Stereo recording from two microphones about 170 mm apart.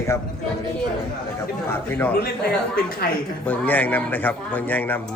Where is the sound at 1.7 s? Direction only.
10° left (ahead or behind).